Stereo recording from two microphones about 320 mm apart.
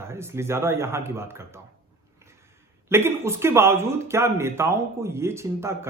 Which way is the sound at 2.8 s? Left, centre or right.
Centre.